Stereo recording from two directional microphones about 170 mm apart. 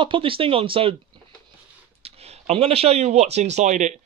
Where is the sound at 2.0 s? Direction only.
40° right (ahead or behind).